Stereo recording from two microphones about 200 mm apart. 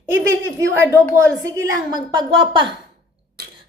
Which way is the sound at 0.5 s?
15° right (ahead or behind).